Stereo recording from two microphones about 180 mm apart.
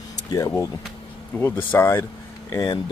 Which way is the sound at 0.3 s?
20° left (ahead or behind).